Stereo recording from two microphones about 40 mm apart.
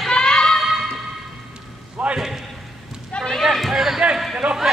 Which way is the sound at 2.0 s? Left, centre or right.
Right.